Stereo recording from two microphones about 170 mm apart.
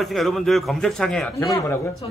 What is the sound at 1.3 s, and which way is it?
Speech, 15° left (ahead or behind).